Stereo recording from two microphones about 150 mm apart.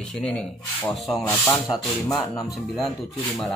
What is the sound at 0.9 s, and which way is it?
Speech, centre (ahead or behind).